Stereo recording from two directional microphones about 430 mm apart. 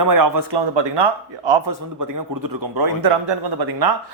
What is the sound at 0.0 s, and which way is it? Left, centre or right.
Speech, right.